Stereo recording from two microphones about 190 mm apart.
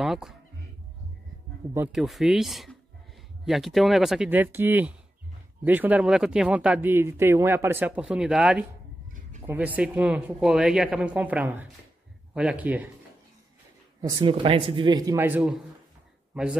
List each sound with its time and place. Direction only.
0.0 s music: centre (ahead or behind)
1.9 s speech: centre (ahead or behind)
14.0 s speech: 25° right (ahead or behind); by 15.6 s 5° right (ahead or behind)